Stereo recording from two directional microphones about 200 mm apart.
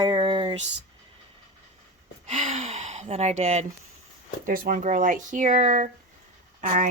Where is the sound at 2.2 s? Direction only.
35° right (ahead or behind).